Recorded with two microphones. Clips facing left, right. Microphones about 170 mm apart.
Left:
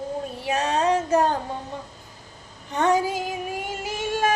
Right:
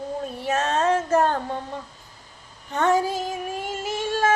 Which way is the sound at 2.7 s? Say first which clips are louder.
Even; 15° left (ahead or behind).